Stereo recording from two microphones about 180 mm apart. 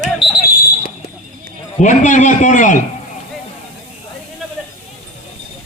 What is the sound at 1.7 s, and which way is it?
A man's voice, 45° left (ahead or behind).